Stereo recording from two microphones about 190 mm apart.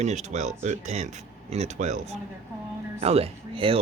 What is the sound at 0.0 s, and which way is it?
Speech, 35° right (ahead or behind).